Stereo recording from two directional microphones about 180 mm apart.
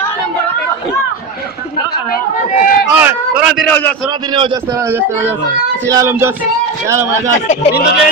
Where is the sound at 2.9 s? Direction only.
10° right (ahead or behind).